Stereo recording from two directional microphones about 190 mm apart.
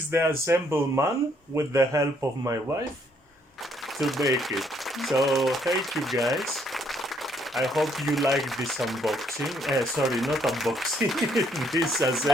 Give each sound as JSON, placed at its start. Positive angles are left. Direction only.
{"t": 0.1, "sound": "speech", "side_deg": -10}
{"t": 4.0, "sound": "speech", "side_deg": 0}